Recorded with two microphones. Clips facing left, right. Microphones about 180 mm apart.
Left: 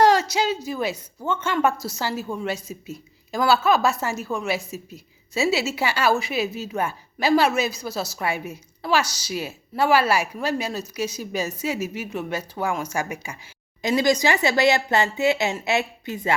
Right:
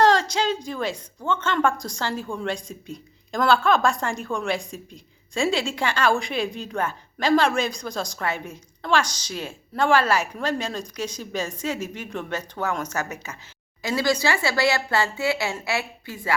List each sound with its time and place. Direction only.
0.0 s a woman's voice: 10° left (ahead or behind)